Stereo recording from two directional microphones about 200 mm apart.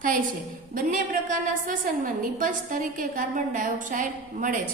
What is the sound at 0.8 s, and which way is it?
A woman's voice, 45° right (ahead or behind).